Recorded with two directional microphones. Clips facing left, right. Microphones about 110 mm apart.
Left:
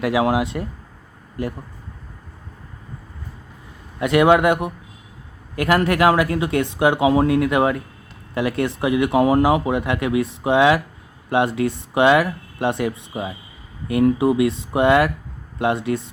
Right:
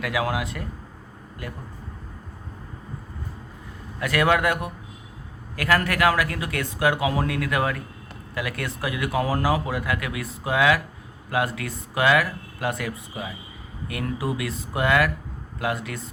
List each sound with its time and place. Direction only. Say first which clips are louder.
0.0 s speech: left 7 dB; 25° left (ahead or behind)
4.0 s speech: left 7 dB; 25° left (ahead or behind)